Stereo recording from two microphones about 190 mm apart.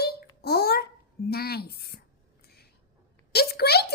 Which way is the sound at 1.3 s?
55° left (ahead or behind).